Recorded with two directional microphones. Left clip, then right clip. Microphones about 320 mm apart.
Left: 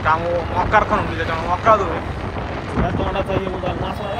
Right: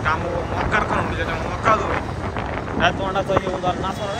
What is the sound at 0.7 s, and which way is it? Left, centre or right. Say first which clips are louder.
Speech: left 6 dB; centre.